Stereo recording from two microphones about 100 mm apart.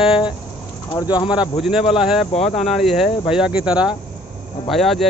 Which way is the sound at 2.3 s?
90° left.